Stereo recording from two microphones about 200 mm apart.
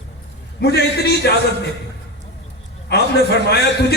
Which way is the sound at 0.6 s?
55° left (ahead or behind).